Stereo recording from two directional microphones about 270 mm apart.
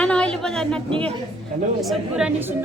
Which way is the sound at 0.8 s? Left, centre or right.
Centre.